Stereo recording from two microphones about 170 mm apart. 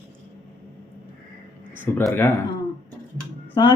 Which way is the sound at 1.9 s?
10° left (ahead or behind).